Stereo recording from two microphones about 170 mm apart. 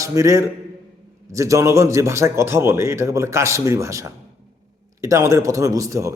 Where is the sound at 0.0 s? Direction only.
20° right (ahead or behind).